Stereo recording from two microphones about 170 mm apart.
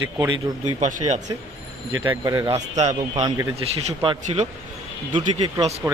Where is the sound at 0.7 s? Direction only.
45° right (ahead or behind).